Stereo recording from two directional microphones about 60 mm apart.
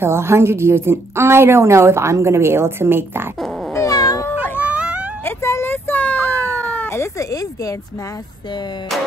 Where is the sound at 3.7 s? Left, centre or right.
Left.